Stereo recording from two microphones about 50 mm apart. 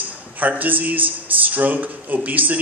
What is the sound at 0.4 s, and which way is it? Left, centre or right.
A man's voice, right.